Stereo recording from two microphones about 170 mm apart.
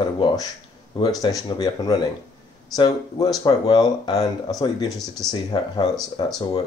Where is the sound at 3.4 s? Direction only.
25° left (ahead or behind).